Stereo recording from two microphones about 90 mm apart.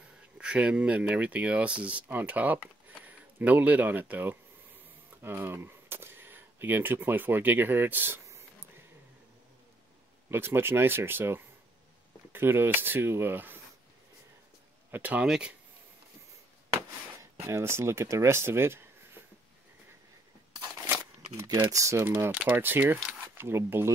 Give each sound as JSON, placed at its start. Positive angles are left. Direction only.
{"t": 0.4, "sound": "speech", "side_deg": -10}
{"t": 10.3, "sound": "speech", "side_deg": -25}
{"t": 14.9, "sound": "speech", "side_deg": -20}
{"t": 17.2, "sound": "speech", "side_deg": -30}
{"t": 21.5, "sound": "speech", "side_deg": -40}